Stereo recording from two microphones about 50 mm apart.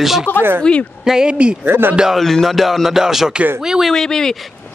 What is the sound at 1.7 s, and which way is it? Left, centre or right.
Speech, right.